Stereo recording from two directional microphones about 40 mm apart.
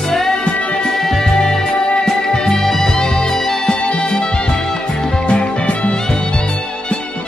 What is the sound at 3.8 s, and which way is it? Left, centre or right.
Music, left.